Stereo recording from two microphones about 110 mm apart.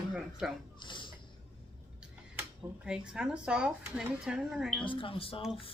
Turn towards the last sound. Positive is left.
turn(degrees=55)  # may be behind; listen again after turning